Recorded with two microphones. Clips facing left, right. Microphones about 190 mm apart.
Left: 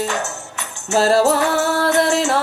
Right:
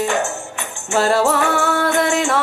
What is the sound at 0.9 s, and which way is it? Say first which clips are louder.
Music: left 2 dB; 35° left (ahead or behind).